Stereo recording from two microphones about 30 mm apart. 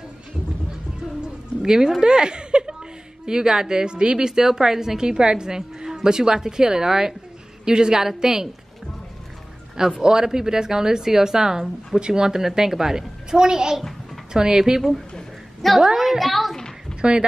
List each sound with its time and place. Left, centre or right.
1.6 s a woman's voice: centre
4.4 s a woman's voice: centre
10.0 s a woman's voice: right
15.8 s a woman's voice: centre
17.0 s speech: right